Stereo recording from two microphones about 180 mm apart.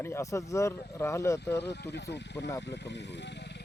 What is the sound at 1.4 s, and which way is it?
Speech, 70° left (ahead or behind).